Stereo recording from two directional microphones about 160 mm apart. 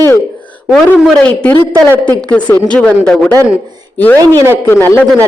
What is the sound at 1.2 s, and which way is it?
Speech, 10° left (ahead or behind).